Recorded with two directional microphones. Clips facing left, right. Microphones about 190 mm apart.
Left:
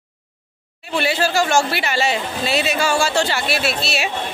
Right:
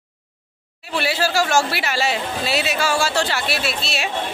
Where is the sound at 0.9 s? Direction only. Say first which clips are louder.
Left 2 dB; 5° right (ahead or behind).